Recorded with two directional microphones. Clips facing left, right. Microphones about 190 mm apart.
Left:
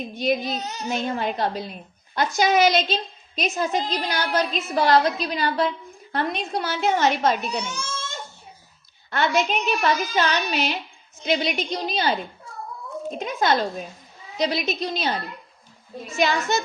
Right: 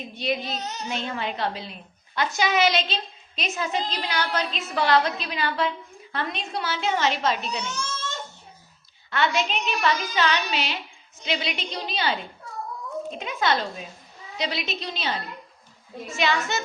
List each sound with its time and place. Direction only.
0.4 s a child's voice: 10° left (ahead or behind)
0.9 s a woman's voice: 45° left (ahead or behind)
7.6 s a child's voice: 10° left (ahead or behind)
9.0 s a woman's voice: 45° left (ahead or behind)